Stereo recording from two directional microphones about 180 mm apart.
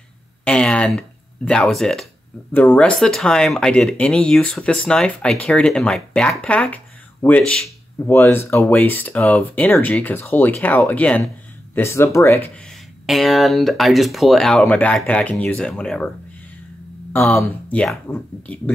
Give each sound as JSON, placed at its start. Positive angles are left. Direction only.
{"t": 0.5, "sound": "a sound", "side_deg": 5}
{"t": 2.5, "sound": "speech", "side_deg": 10}
{"t": 17.1, "sound": "speech", "side_deg": 10}